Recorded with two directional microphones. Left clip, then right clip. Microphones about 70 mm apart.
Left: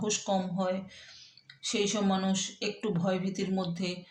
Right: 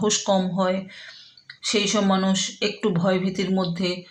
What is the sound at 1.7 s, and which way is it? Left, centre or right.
Speech, right.